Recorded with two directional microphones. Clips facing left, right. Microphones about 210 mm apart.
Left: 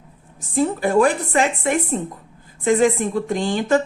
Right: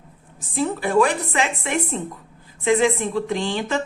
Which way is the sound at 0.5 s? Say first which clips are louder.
Left 2 dB; 45° left (ahead or behind).